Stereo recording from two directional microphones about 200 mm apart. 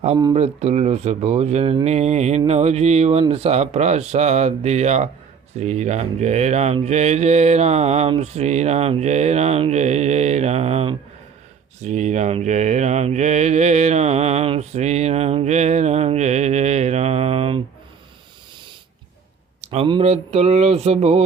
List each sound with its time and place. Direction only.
0.3 s mantra: 35° right (ahead or behind)
19.6 s mantra: 30° right (ahead or behind)